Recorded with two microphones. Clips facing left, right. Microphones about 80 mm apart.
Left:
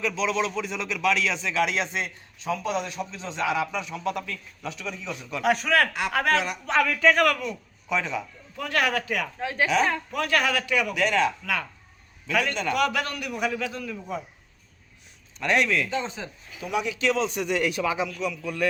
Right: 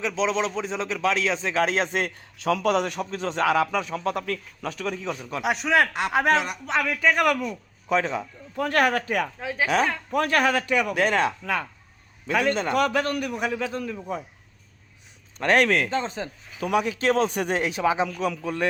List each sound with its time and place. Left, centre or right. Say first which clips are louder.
0.1 s a man's voice: right 2 dB; right
2.4 s a man's voice: right 5 dB; right
5.4 s a man's voice: even; centre
7.2 s a man's voice: even; centre
7.9 s a man's voice: right 4 dB; right
9.4 s speech: left 1 dB; centre
10.1 s a man's voice: right 3 dB; right
11.3 s a man's voice: right 2 dB; right
15.4 s speech: right 3 dB; right
15.9 s a man's voice: right 3 dB; right
16.6 s a man's voice: right 4 dB; right
17.6 s a man's voice: right 4 dB; right